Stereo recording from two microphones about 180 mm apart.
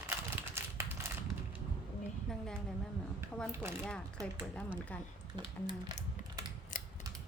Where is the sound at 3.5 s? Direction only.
15° right (ahead or behind).